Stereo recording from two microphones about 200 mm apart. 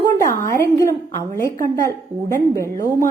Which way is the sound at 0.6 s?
15° left (ahead or behind).